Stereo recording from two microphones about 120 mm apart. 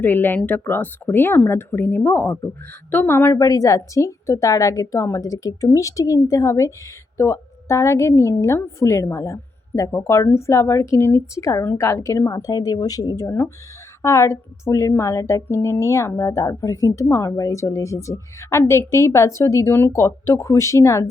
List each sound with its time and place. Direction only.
0.0 s a woman's voice: 15° left (ahead or behind)